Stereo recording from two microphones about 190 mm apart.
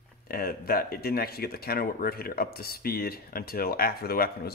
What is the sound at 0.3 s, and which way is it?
Speech, 50° left (ahead or behind).